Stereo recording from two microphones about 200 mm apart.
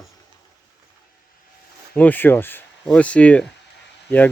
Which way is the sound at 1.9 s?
10° left (ahead or behind).